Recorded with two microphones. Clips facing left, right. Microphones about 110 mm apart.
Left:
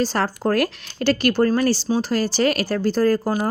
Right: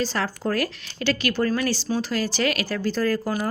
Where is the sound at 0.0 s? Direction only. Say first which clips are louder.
Left 4 dB; 45° left (ahead or behind).